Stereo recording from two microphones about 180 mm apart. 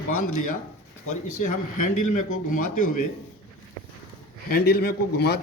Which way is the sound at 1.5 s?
45° left (ahead or behind).